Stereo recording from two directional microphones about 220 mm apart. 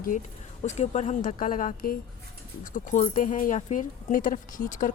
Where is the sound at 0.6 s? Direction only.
30° left (ahead or behind).